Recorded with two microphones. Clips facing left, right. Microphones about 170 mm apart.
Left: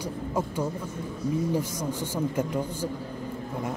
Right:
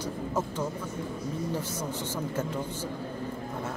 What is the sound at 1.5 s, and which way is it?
Speech, 10° left (ahead or behind).